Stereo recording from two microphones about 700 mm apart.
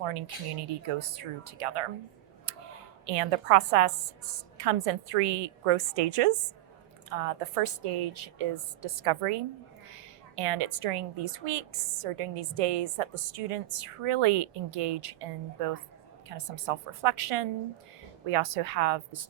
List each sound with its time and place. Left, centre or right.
0.0 s a woman's voice: right
3.1 s a woman's voice: right